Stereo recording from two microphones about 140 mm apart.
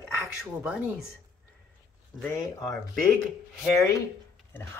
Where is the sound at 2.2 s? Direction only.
20° left (ahead or behind).